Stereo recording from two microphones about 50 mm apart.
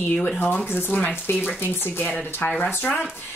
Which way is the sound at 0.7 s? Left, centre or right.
Left.